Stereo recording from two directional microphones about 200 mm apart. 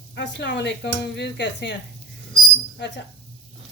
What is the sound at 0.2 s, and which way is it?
Speech, 60° left (ahead or behind).